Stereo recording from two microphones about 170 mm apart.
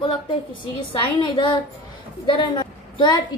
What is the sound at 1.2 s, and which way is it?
A woman's voice, 25° left (ahead or behind).